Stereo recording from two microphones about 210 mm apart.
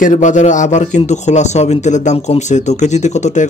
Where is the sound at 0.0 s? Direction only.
35° left (ahead or behind).